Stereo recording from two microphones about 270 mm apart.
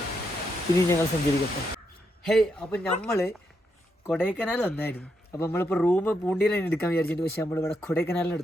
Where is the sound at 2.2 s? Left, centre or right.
Centre.